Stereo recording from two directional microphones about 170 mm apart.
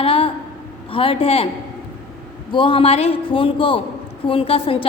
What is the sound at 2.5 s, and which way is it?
A man's voice, 30° left (ahead or behind).